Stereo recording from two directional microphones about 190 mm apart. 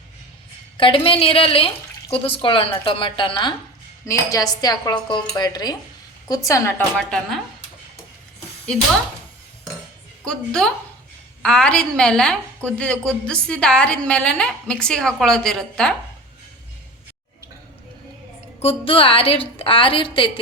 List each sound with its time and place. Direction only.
0.8 s a woman's voice: 30° left (ahead or behind); by 7.4 s 5° left (ahead or behind)
10.2 s a woman's voice: 5° left (ahead or behind)
18.6 s speech: 30° left (ahead or behind)